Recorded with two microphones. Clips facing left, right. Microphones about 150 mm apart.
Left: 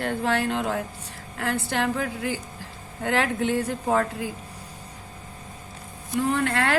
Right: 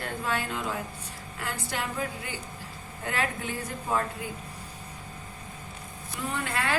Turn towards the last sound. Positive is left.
turn(degrees=75)  # may be behind; listen again after turning